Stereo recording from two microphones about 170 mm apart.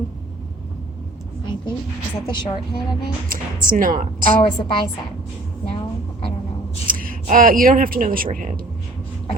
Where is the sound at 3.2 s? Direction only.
55° right (ahead or behind).